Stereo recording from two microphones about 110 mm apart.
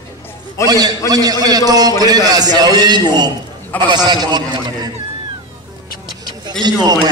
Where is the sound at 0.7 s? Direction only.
35° right (ahead or behind).